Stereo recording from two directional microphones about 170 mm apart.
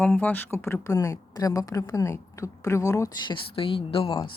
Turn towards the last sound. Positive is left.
turn(degrees=30)  # may be behind; listen again after turning